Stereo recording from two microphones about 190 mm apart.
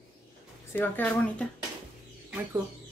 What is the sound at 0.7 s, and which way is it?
Speech, 10° left (ahead or behind).